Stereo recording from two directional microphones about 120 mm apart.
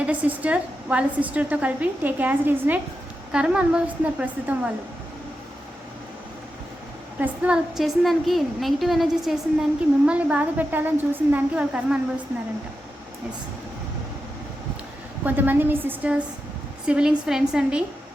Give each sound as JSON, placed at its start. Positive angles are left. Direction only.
{"t": 0.0, "sound": "a woman's voice", "side_deg": -10}
{"t": 7.2, "sound": "a woman's voice", "side_deg": -10}
{"t": 15.2, "sound": "a woman's voice", "side_deg": -15}